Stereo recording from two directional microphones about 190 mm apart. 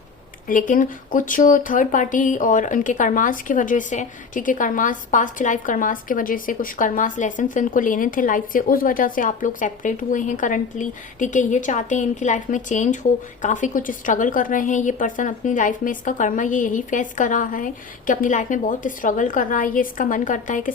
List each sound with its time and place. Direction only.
0.4 s speech: 45° left (ahead or behind)